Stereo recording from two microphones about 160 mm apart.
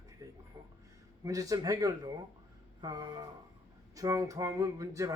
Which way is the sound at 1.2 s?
20° right (ahead or behind).